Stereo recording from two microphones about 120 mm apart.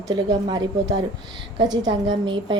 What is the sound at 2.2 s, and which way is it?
Speech, 40° right (ahead or behind).